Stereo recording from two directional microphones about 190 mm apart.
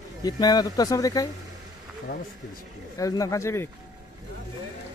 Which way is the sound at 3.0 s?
15° left (ahead or behind).